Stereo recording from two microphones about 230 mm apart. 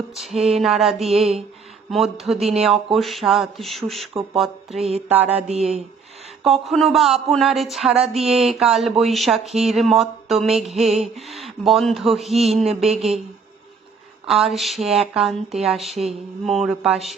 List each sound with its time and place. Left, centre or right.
0.1 s speech: centre
4.9 s a sound: right
6.4 s speech: centre
14.3 s speech: centre